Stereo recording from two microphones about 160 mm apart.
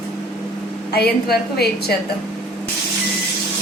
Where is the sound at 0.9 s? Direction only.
80° left.